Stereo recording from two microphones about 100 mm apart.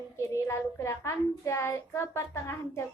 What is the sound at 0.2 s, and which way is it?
A child's voice, 30° left (ahead or behind).